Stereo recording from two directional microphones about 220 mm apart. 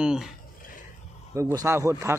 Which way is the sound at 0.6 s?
40° left (ahead or behind).